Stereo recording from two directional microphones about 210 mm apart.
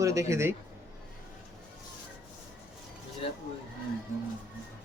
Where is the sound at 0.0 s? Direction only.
15° right (ahead or behind).